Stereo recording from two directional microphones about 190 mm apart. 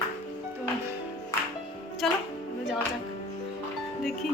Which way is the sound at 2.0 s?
Centre (ahead or behind).